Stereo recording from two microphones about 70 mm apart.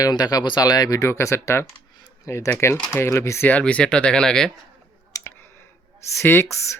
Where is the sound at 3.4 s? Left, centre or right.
Left.